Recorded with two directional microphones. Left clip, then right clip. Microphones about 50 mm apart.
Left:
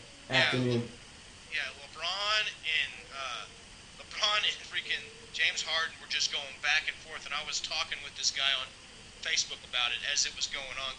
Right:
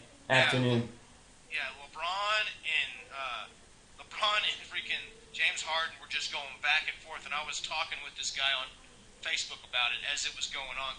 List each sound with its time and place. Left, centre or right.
0.3 s speech: right
1.5 s a sound: right
4.1 s a man's voice: right